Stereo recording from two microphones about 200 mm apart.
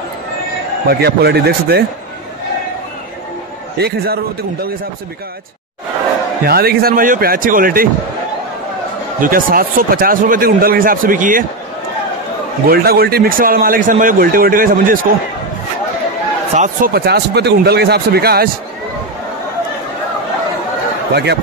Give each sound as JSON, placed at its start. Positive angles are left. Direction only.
{"t": 0.8, "sound": "speech", "side_deg": -55}
{"t": 3.7, "sound": "speech", "side_deg": -50}
{"t": 6.4, "sound": "speech", "side_deg": -50}
{"t": 9.2, "sound": "speech", "side_deg": -45}
{"t": 12.6, "sound": "speech", "side_deg": -50}
{"t": 16.5, "sound": "speech", "side_deg": -40}
{"t": 21.1, "sound": "speech", "side_deg": -55}